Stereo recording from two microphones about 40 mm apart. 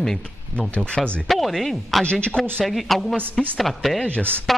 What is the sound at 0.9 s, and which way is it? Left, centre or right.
Speech, left.